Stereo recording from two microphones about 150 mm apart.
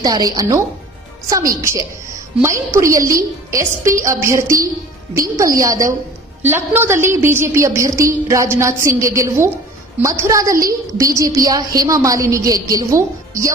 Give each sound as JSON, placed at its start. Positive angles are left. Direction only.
{"t": 0.0, "sound": "a woman's voice", "side_deg": -25}